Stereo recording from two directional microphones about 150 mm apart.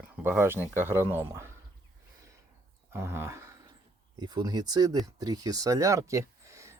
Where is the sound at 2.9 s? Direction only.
15° right (ahead or behind).